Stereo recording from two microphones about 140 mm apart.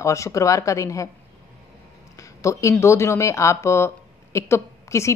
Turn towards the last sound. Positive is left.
turn(degrees=20)  # may be behind; listen again after turning